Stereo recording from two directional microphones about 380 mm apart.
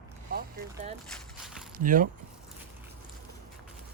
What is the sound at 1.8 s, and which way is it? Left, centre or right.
Speech, right.